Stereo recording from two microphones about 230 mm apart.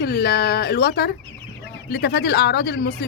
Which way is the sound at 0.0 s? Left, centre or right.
Left.